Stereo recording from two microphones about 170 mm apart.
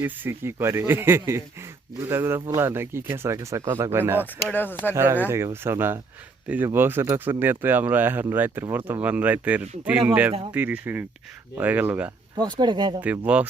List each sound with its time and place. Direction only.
0.0 s speech: 15° right (ahead or behind)
4.4 s speech: 10° left (ahead or behind)
4.9 s speech: 15° right (ahead or behind)
12.4 s speech: 25° right (ahead or behind)
13.0 s speech: 10° right (ahead or behind)